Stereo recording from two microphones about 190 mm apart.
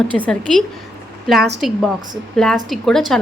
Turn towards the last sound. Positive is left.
turn(degrees=0)  # may be behind; listen again after turning